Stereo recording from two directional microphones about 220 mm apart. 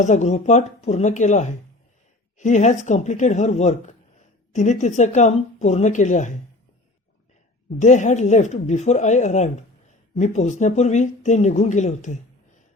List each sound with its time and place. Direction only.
0.0 s speech: 30° left (ahead or behind)
7.8 s speech: 35° left (ahead or behind)